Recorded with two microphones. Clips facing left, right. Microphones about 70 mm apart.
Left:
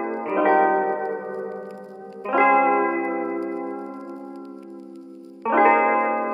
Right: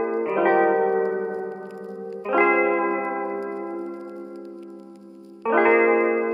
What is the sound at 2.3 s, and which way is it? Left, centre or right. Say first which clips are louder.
Music: left 2 dB; centre.